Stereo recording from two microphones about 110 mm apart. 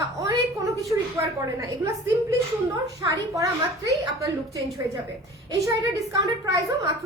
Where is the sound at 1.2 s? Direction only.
25° right (ahead or behind).